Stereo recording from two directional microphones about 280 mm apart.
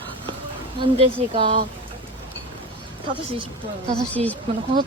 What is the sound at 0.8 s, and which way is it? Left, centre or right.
Speech, centre.